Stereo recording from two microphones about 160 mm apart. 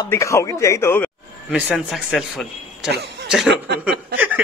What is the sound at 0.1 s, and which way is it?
Speech, 20° left (ahead or behind).